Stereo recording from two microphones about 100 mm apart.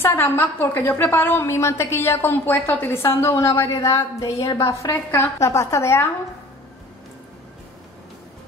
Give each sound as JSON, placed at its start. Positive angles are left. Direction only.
{"t": 0.0, "sound": "a woman's voice", "side_deg": 25}